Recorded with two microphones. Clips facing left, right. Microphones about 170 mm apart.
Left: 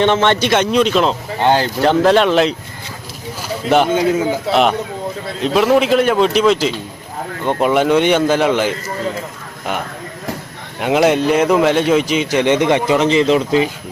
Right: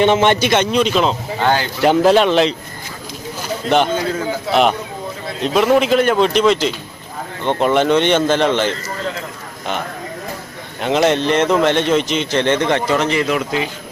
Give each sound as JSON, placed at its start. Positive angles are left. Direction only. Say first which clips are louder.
{"t": 0.0, "sound": "a man's voice", "louder": "right 1 dB", "side_deg": -10}
{"t": 1.4, "sound": "speech", "louder": "left 3 dB", "side_deg": 25}
{"t": 1.8, "sound": "a man's voice", "louder": "right 1 dB", "side_deg": -5}
{"t": 3.9, "sound": "a man's voice", "louder": "left 5 dB", "side_deg": 20}
{"t": 5.4, "sound": "a man's voice", "louder": "left 1 dB", "side_deg": 0}
{"t": 10.8, "sound": "speech", "louder": "left 2 dB", "side_deg": 10}